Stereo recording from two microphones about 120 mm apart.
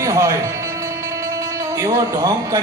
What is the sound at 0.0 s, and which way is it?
Speech, 25° right (ahead or behind).